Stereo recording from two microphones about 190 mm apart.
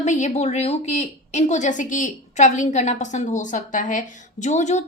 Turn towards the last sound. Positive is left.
turn(degrees=40)  # may be behind; listen again after turning